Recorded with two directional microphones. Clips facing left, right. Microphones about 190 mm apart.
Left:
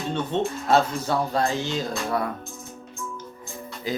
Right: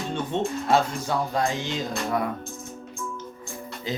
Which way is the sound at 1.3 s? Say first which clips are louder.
Left 2 dB; 15° right (ahead or behind).